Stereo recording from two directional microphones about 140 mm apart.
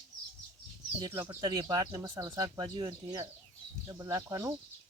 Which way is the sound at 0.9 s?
30° right (ahead or behind).